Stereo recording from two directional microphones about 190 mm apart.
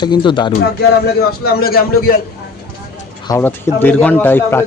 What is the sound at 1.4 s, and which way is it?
Speech, 55° left (ahead or behind).